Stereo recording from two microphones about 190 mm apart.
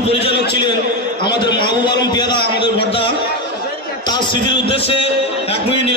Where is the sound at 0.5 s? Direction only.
25° left (ahead or behind).